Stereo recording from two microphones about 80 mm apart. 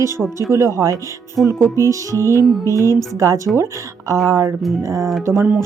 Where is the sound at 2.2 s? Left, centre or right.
Right.